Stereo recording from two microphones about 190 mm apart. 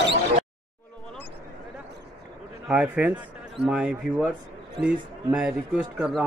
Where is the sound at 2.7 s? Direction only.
5° right (ahead or behind).